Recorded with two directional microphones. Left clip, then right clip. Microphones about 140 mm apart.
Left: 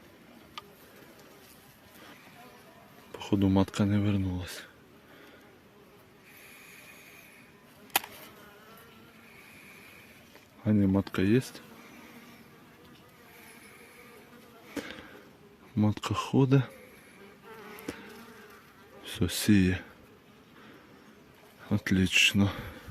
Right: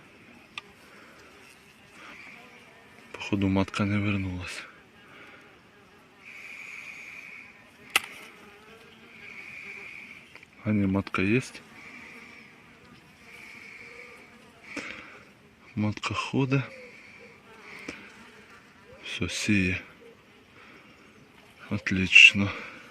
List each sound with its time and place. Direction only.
3.1 s speech: 20° left (ahead or behind)
6.3 s a sound: 20° left (ahead or behind)
10.6 s speech: 15° left (ahead or behind)
14.7 s sniff: 35° left (ahead or behind)
15.8 s speech: 40° left (ahead or behind)
17.9 s bee: 40° left (ahead or behind)
19.0 s speech: 45° left (ahead or behind)
21.6 s speech: 35° left (ahead or behind)